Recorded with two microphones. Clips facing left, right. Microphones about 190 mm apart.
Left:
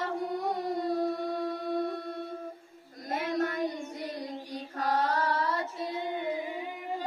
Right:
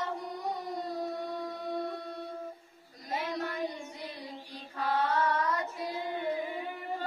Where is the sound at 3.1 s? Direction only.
50° left (ahead or behind); by 6.2 s 20° left (ahead or behind).